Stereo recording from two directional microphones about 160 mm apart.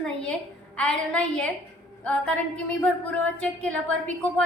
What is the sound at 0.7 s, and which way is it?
A woman's voice, 5° left (ahead or behind).